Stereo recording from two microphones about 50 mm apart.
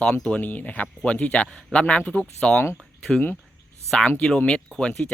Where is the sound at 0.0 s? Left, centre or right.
Centre.